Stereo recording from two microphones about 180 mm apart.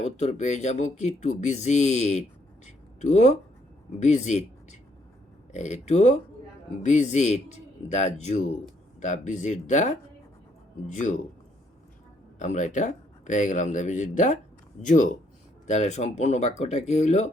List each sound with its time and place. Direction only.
0.2 s speech: 40° left (ahead or behind)
12.4 s speech: 45° left (ahead or behind)